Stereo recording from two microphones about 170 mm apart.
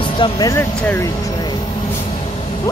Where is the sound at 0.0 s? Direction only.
25° left (ahead or behind).